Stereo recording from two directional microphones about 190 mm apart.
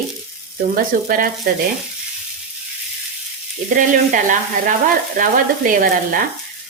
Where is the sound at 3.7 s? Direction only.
45° right (ahead or behind).